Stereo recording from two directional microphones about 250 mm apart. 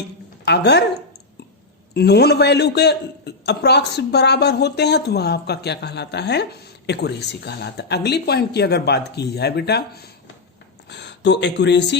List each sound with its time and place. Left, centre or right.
0.4 s a man's voice: left
1.9 s a man's voice: left